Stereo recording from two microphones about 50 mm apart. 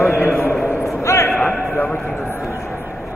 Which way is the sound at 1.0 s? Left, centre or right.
Left.